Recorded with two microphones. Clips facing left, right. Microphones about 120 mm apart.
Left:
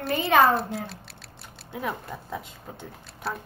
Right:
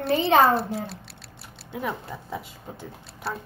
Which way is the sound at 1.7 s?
Centre (ahead or behind).